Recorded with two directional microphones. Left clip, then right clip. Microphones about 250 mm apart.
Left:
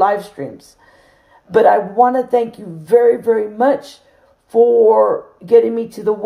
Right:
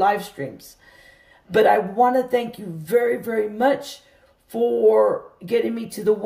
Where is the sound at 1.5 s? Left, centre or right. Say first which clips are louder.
Left 5 dB; centre.